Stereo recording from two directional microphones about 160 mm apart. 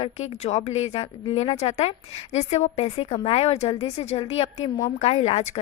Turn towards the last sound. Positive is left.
turn(degrees=40)  # may be behind; listen again after turning